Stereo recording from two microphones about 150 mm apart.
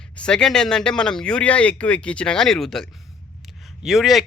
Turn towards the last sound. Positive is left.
turn(degrees=0)  # may be behind; listen again after turning